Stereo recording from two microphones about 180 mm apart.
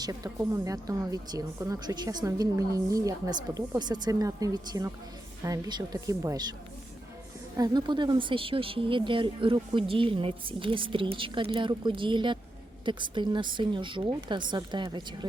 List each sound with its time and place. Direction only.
0.0 s a woman's voice: 20° right (ahead or behind)
7.5 s a woman's voice: 20° right (ahead or behind)